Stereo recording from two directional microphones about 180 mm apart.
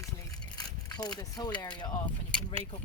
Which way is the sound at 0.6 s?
20° left (ahead or behind).